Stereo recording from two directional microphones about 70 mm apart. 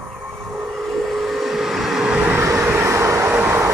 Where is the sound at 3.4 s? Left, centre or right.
Right.